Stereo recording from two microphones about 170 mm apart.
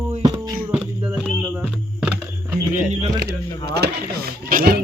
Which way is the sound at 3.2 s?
70° right (ahead or behind).